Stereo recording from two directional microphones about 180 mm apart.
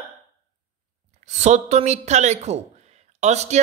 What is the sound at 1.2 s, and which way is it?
Speech, 40° right (ahead or behind).